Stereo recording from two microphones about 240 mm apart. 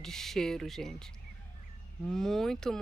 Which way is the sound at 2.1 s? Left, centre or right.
Centre.